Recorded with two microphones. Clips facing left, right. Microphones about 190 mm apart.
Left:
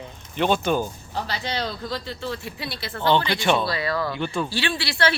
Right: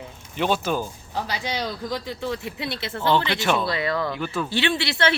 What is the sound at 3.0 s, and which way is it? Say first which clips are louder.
Speech: left 1 dB; 5° right (ahead or behind).